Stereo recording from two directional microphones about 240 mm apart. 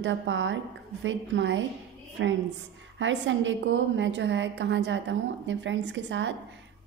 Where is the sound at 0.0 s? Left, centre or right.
Right.